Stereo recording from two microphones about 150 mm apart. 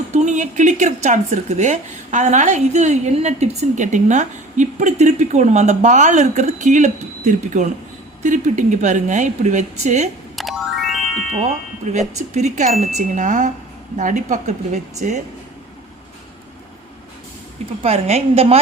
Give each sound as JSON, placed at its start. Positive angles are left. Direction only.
{"t": 0.1, "sound": "speech", "side_deg": -50}
{"t": 10.3, "sound": "music", "side_deg": 0}
{"t": 11.9, "sound": "speech", "side_deg": -50}
{"t": 17.8, "sound": "speech", "side_deg": -45}